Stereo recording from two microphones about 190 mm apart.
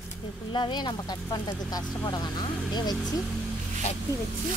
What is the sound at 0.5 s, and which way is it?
Speech, 25° left (ahead or behind).